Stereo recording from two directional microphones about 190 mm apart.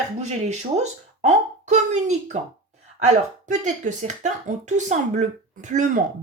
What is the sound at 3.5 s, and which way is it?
Speech, 40° right (ahead or behind).